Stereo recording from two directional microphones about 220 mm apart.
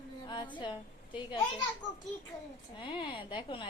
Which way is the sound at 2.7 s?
20° left (ahead or behind).